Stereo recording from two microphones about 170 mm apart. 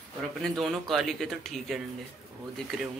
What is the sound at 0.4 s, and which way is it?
A man's voice, centre (ahead or behind).